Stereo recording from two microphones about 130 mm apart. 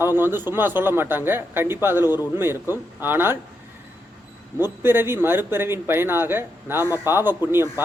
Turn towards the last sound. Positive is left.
turn(degrees=-15)  # may be behind; listen again after turning